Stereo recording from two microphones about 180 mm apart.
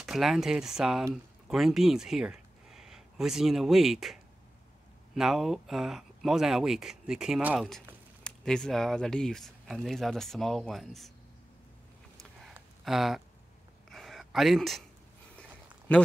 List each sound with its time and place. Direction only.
0.0 s speech: centre (ahead or behind)
12.8 s speech: centre (ahead or behind)
13.8 s a sound: centre (ahead or behind)